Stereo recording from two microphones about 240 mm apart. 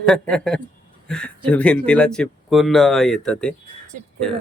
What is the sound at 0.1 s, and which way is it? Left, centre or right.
Speech, centre.